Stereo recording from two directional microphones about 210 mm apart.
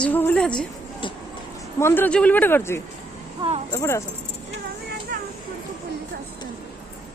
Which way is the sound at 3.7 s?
15° left (ahead or behind).